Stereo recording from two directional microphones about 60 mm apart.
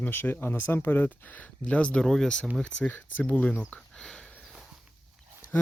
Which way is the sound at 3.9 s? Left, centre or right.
Centre.